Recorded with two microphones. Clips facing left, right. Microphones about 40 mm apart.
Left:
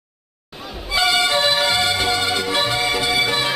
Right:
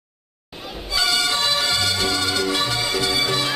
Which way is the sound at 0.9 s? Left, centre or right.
Left.